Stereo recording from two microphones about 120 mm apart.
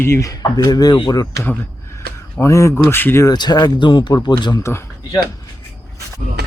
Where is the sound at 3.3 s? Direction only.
35° left (ahead or behind).